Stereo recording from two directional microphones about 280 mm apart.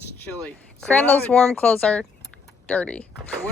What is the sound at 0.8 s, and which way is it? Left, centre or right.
Speech, centre.